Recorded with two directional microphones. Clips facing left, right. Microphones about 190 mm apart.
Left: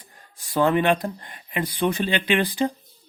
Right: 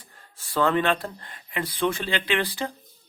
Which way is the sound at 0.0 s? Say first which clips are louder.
Left 1 dB; 15° left (ahead or behind).